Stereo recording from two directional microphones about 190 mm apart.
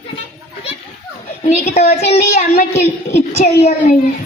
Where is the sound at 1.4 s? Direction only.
35° left (ahead or behind).